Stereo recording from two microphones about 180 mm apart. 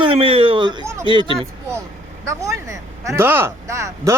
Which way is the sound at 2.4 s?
15° right (ahead or behind).